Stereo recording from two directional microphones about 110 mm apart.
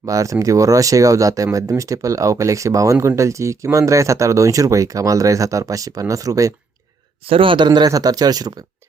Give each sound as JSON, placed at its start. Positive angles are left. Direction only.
{"t": 0.0, "sound": "speech", "side_deg": -30}
{"t": 7.3, "sound": "speech", "side_deg": -55}